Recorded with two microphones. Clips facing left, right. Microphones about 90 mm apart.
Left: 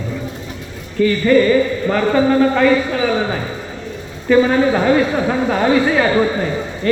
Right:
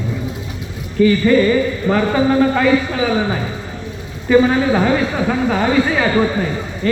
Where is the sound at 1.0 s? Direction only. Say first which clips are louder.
Even; 15° right (ahead or behind); by 6.4 s 5° left (ahead or behind).